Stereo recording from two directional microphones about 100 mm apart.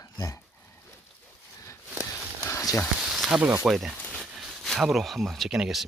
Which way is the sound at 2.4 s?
30° left (ahead or behind).